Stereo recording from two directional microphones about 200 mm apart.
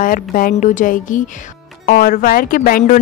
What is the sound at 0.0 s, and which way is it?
A woman's voice, 45° left (ahead or behind).